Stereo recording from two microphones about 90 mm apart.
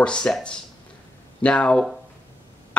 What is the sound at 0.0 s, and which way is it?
Speech, 10° left (ahead or behind).